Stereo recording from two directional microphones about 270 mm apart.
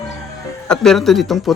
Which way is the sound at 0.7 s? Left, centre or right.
Centre.